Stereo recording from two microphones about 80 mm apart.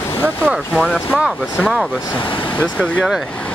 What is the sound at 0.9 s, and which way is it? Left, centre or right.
Speech, centre.